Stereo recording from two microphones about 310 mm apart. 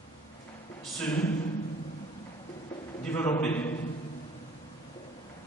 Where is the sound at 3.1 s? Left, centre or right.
Centre.